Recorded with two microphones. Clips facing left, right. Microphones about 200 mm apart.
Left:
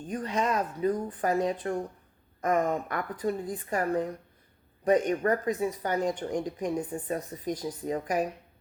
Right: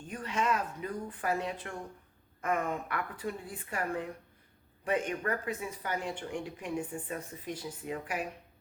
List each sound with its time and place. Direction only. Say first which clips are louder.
0.1 s speech: left 3 dB; 35° left (ahead or behind)